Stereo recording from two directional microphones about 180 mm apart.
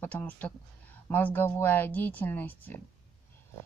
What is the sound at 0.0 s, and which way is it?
Speech, 10° left (ahead or behind).